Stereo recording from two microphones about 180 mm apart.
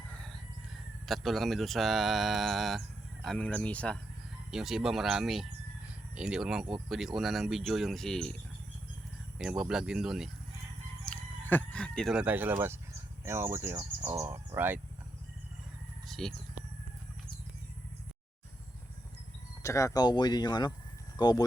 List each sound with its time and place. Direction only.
1.0 s speech: centre (ahead or behind)
9.4 s speech: 5° right (ahead or behind)
11.0 s chicken: 10° left (ahead or behind); by 12.8 s 15° right (ahead or behind)
13.2 s speech: 15° right (ahead or behind)
16.0 s a sound: centre (ahead or behind)
19.6 s speech: 15° left (ahead or behind)